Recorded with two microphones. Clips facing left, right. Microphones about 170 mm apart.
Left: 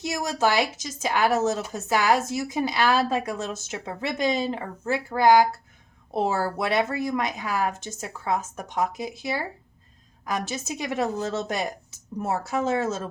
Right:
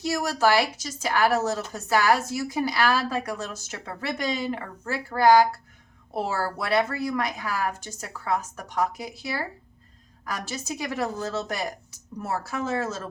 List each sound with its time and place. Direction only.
0.0 s a woman's voice: 20° left (ahead or behind)